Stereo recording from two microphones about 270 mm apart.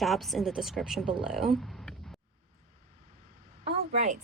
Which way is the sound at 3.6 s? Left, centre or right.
Right.